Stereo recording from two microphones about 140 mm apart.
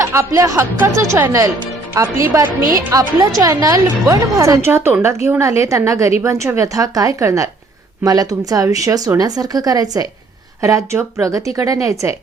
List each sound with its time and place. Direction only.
0.0 s speech: 20° right (ahead or behind)